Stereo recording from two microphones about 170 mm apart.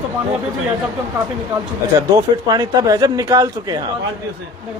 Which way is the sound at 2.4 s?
20° right (ahead or behind).